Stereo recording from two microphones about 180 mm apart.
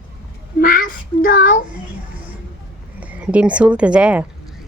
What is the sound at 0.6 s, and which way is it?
Child singing, 50° left (ahead or behind).